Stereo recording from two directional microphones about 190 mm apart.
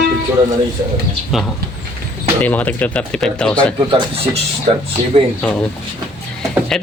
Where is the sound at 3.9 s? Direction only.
30° right (ahead or behind).